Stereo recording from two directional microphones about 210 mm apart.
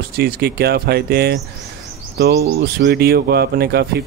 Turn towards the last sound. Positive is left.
turn(degrees=-50)  # may be behind; listen again after turning